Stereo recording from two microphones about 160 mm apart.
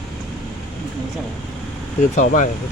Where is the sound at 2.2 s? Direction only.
50° left (ahead or behind).